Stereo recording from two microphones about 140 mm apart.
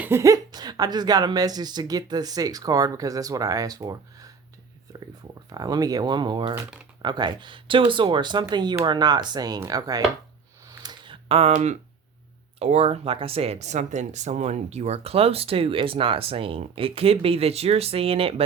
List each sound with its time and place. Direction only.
0.0 s speech: 20° right (ahead or behind)
10.7 s a sound: 30° right (ahead or behind)
11.5 s speech: 55° right (ahead or behind)